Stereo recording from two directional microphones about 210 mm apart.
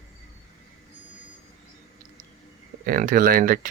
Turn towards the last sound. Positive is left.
turn(degrees=-45)  # may be behind; listen again after turning